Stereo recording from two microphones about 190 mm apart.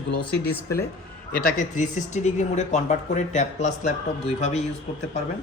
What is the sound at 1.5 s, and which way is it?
Speech, 40° left (ahead or behind).